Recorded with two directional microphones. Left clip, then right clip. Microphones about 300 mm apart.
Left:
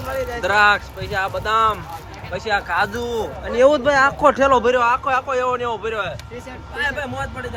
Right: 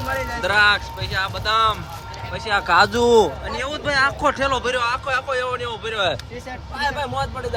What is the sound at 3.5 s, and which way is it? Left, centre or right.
Speech, centre.